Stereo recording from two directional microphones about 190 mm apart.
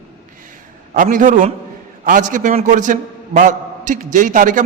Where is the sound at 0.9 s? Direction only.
45° right (ahead or behind).